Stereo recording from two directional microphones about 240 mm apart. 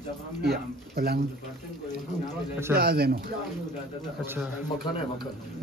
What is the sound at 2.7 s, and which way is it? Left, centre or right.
Speech, right.